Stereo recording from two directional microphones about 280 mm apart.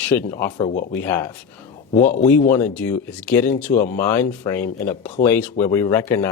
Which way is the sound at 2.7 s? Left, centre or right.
Centre.